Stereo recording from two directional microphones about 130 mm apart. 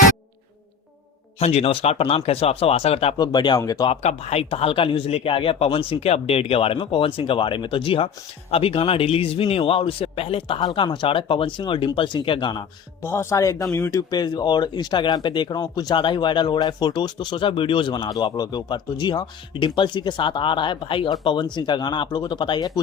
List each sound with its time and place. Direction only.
1.4 s speech: 50° left (ahead or behind)
3.2 s speech: 35° left (ahead or behind)
4.0 s speech: 55° left (ahead or behind); by 12.6 s 35° left (ahead or behind)
13.0 s speech: 20° left (ahead or behind); by 22.8 s 35° left (ahead or behind)